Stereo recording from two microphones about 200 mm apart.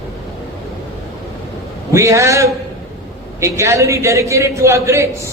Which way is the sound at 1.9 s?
15° right (ahead or behind).